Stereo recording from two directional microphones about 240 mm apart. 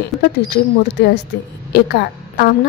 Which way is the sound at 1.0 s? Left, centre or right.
Left.